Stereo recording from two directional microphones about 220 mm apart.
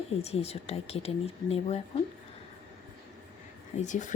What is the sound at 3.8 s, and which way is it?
Speech, 35° left (ahead or behind).